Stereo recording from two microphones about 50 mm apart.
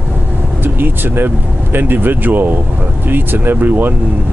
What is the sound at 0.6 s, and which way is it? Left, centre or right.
Speech, right.